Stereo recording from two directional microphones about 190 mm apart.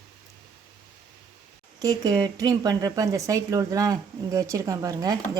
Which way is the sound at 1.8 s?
20° right (ahead or behind).